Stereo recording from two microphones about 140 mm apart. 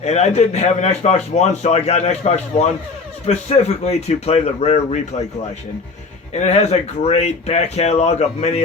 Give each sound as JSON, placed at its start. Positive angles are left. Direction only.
{"t": 0.0, "sound": "a man's voice", "side_deg": 50}
{"t": 6.3, "sound": "a man's voice", "side_deg": 55}